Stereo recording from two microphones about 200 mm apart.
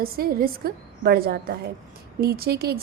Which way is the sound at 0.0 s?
50° right (ahead or behind).